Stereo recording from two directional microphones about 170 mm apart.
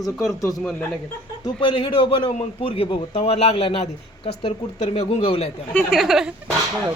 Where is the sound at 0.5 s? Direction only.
5° left (ahead or behind).